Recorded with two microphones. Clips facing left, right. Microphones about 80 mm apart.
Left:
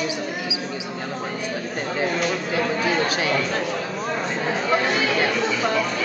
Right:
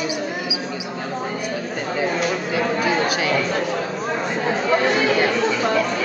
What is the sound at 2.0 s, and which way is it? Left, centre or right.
Speech, centre.